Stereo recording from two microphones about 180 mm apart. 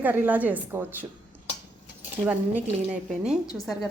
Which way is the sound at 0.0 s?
10° right (ahead or behind).